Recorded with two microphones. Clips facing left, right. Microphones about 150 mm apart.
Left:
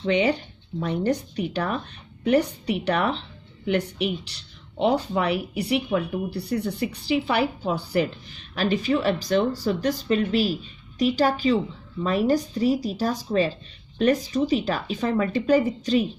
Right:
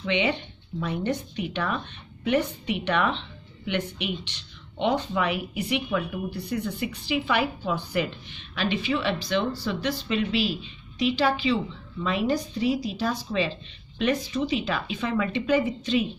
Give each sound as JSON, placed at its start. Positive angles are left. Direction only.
{"t": 0.0, "sound": "a woman's voice", "side_deg": 40}